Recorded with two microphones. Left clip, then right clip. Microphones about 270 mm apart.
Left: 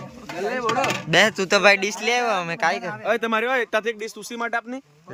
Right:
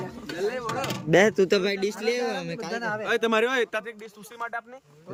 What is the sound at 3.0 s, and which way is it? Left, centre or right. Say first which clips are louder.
Speech: even; centre.